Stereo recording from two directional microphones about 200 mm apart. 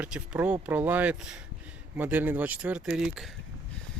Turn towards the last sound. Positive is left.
turn(degrees=0)  # may be behind; listen again after turning